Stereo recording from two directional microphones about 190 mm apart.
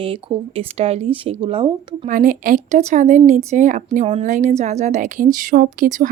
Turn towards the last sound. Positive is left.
turn(degrees=-45)  # may be behind; listen again after turning